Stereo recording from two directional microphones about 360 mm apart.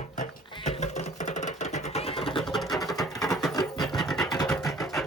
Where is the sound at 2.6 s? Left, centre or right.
Centre.